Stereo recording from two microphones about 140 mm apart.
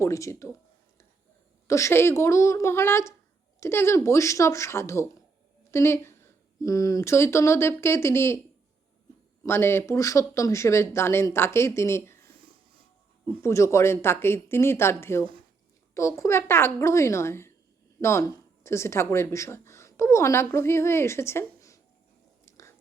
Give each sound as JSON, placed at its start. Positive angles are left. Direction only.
{"t": 0.0, "sound": "speech", "side_deg": 20}
{"t": 1.6, "sound": "speech", "side_deg": 20}
{"t": 9.4, "sound": "speech", "side_deg": 15}
{"t": 13.2, "sound": "speech", "side_deg": 20}
{"t": 22.4, "sound": "whispering", "side_deg": 20}